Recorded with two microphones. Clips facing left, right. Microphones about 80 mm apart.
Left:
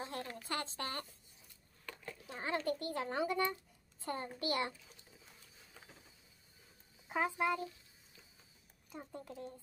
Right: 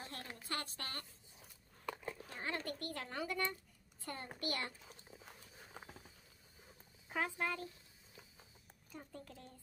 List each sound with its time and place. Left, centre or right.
0.0 s a sound: left
0.5 s a child's voice: left
2.3 s a child's voice: left
5.2 s a sound: right
7.1 s speech: centre
8.9 s a child's voice: left